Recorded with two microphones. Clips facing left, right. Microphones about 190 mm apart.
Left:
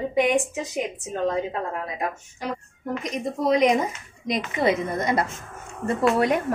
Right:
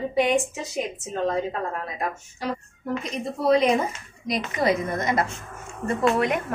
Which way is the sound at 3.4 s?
15° left (ahead or behind).